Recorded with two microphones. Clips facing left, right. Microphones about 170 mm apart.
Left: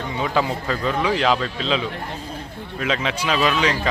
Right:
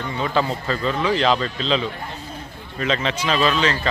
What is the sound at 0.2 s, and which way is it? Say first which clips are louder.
A man's voice: even; 10° left (ahead or behind).